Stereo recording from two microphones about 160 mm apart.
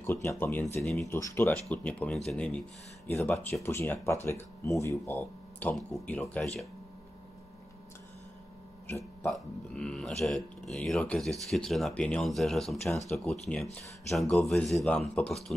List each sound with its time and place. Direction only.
0.0 s speech: 15° left (ahead or behind)
0.7 s speech: centre (ahead or behind)
1.1 s speech: 15° left (ahead or behind)
8.8 s a sound: 15° left (ahead or behind)
9.3 s speech: 5° left (ahead or behind)